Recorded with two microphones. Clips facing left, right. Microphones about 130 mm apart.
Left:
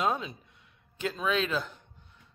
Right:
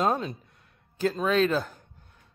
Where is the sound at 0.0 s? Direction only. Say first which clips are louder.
Right 4 dB; 40° right (ahead or behind).